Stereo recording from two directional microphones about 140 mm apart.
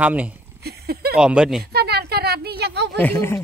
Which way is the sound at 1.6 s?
90° right.